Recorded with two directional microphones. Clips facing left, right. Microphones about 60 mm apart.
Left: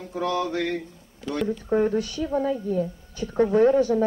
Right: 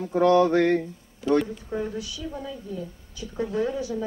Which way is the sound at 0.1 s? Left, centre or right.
Right.